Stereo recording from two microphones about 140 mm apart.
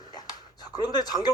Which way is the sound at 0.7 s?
25° left (ahead or behind).